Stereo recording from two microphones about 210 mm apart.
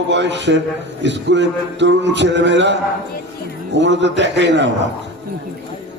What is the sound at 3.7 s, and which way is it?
Speech, 60° right (ahead or behind).